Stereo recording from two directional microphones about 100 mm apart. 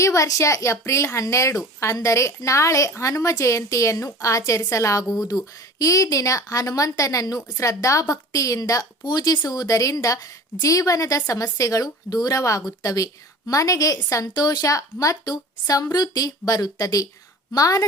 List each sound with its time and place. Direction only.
0.0 s a woman's voice: 30° left (ahead or behind)